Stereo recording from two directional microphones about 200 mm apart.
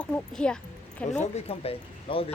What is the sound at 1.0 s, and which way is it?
Speech, 35° left (ahead or behind).